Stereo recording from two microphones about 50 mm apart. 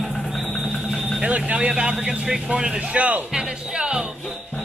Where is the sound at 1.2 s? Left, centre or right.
Right.